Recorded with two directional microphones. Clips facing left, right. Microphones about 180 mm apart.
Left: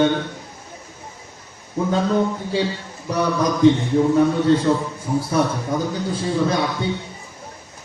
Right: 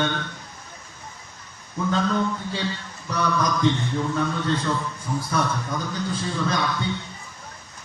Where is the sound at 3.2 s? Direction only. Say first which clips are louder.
Left 3 dB; 30° left (ahead or behind).